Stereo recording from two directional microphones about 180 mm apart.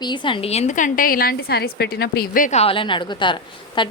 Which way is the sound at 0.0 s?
25° left (ahead or behind).